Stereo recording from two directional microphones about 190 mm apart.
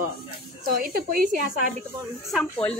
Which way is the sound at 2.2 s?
Centre (ahead or behind).